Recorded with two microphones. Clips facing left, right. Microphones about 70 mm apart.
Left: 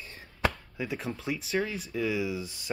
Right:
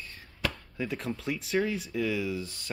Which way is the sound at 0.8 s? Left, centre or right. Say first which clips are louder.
Right 1 dB; centre.